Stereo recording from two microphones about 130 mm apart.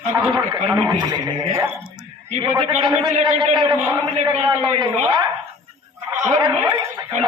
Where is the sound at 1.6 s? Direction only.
20° right (ahead or behind).